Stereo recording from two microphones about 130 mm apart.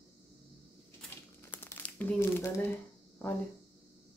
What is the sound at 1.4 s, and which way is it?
Crumpling, 15° left (ahead or behind).